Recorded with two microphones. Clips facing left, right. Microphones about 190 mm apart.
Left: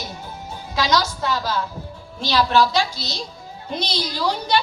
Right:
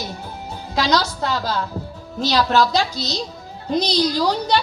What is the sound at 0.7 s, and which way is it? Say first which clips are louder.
A child's voice: right 1 dB; 35° right (ahead or behind).